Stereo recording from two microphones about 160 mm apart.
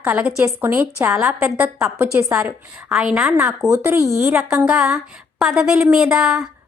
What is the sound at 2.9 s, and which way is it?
Speech, 5° right (ahead or behind).